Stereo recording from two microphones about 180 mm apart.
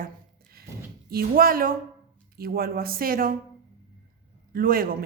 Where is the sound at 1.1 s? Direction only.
55° right (ahead or behind).